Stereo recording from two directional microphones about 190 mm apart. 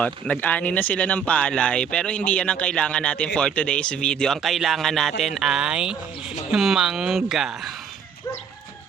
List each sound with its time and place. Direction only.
0.0 s speech: 5° left (ahead or behind)